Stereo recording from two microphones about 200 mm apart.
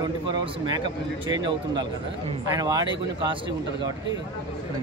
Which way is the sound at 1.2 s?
25° right (ahead or behind).